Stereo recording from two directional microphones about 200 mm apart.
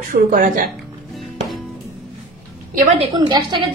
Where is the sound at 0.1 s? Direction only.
45° right (ahead or behind).